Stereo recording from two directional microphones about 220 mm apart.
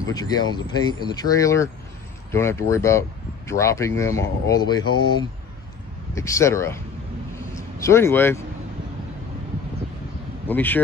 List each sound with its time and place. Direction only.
0.0 s speech: 15° left (ahead or behind)
6.1 s speech: 15° left (ahead or behind)
10.5 s speech: 10° left (ahead or behind)